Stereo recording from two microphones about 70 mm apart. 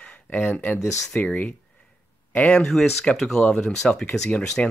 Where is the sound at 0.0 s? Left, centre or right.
Left.